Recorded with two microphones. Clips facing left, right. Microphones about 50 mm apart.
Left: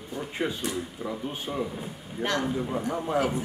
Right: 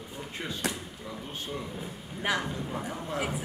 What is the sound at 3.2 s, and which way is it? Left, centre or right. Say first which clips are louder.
Speech: left 6 dB; centre.